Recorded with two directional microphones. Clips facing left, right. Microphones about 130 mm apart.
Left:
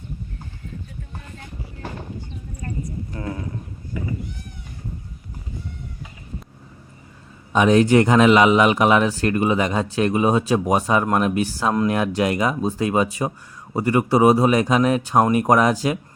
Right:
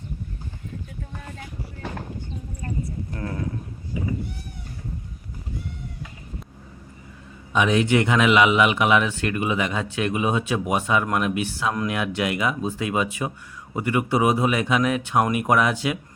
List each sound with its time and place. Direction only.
1.4 s music: 5° right (ahead or behind)
3.2 s speech: 5° left (ahead or behind)
7.5 s speech: 40° left (ahead or behind)